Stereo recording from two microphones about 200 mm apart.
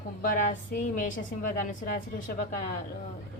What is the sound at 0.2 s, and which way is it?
A woman's voice, 40° left (ahead or behind).